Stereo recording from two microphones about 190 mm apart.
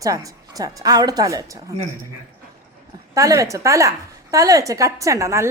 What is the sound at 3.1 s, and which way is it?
A woman's voice, 15° right (ahead or behind).